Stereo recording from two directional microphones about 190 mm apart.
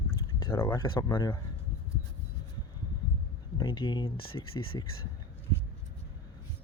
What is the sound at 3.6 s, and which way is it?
Speech, 25° left (ahead or behind).